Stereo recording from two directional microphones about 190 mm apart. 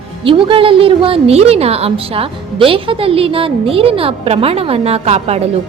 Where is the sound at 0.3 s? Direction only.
25° right (ahead or behind).